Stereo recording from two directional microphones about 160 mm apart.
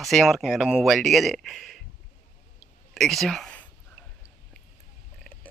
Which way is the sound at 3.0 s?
Centre (ahead or behind).